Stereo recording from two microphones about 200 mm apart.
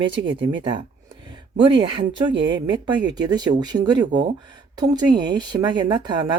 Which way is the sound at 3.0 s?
20° right (ahead or behind).